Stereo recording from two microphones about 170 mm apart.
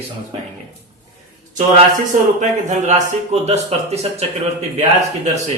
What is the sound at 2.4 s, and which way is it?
A man's voice, 45° right (ahead or behind).